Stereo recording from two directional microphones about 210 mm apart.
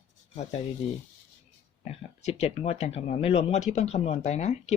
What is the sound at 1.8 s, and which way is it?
Speech, 30° left (ahead or behind).